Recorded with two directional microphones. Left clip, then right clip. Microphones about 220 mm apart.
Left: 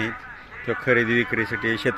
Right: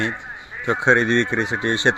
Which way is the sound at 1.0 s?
55° right (ahead or behind).